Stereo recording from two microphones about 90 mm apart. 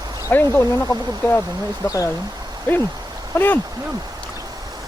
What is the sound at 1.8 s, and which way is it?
Speech, 35° left (ahead or behind).